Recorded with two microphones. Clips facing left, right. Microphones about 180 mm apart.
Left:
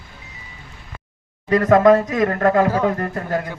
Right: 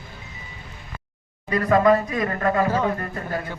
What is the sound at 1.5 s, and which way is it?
Speech, 80° left.